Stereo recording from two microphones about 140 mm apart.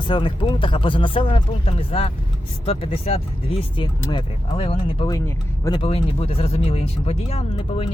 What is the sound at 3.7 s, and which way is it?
Speech, 35° left (ahead or behind).